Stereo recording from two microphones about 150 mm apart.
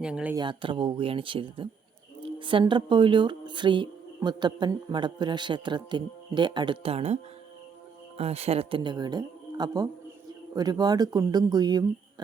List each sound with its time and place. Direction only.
0.0 s speech: 5° right (ahead or behind)
0.3 s speech: 35° right (ahead or behind)
8.2 s speech: 45° right (ahead or behind); by 11.9 s 25° right (ahead or behind)